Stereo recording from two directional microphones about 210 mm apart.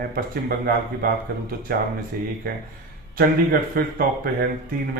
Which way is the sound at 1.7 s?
45° right (ahead or behind).